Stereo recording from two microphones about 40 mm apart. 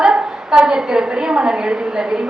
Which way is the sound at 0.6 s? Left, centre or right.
Centre.